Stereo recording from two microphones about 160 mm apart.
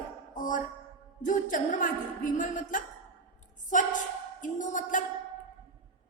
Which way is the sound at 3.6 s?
55° left (ahead or behind).